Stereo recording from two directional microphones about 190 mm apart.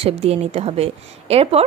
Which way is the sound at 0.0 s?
35° right (ahead or behind).